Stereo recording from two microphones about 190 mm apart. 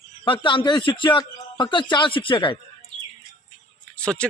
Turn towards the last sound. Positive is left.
turn(degrees=5)  # may be behind; listen again after turning